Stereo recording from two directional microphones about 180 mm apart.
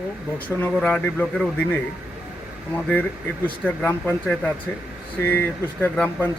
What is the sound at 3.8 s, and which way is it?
Speech, 10° left (ahead or behind).